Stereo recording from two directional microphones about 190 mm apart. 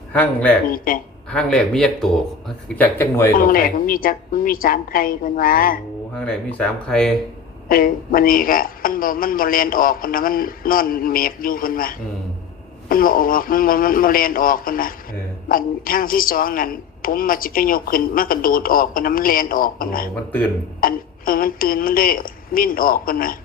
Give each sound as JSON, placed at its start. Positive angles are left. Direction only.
{"t": 0.1, "sound": "speech", "side_deg": 10}
{"t": 0.7, "sound": "a woman's voice", "side_deg": 50}
{"t": 1.3, "sound": "speech", "side_deg": 5}
{"t": 3.3, "sound": "a woman's voice", "side_deg": 50}
{"t": 6.1, "sound": "speech", "side_deg": 5}
{"t": 7.7, "sound": "a woman's voice", "side_deg": 50}